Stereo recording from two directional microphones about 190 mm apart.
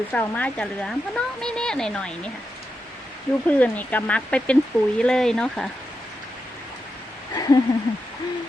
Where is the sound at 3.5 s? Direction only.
10° left (ahead or behind).